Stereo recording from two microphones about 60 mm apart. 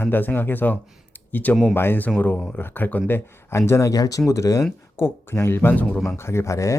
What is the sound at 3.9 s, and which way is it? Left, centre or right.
Speech, left.